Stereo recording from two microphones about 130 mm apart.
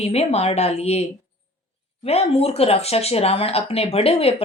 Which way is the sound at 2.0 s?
50° left (ahead or behind).